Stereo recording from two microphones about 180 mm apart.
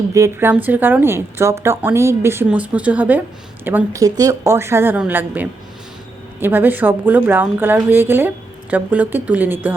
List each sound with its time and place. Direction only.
0.1 s a woman's voice: 15° right (ahead or behind)